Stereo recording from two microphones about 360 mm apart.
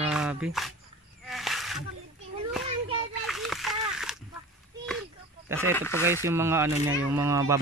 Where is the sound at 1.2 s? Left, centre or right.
Centre.